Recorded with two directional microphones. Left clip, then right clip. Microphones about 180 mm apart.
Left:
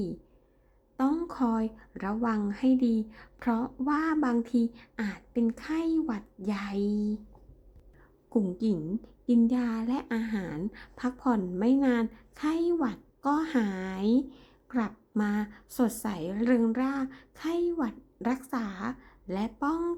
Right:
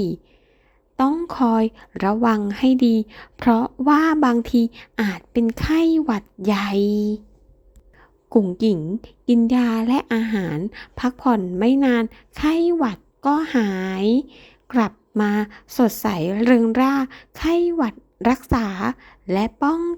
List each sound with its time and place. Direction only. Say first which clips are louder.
1.3 s a woman's voice: right 11 dB; 30° right (ahead or behind)
7.9 s a sound: right 12 dB; 30° right (ahead or behind)
8.5 s a woman's voice: right 10 dB; 35° right (ahead or behind)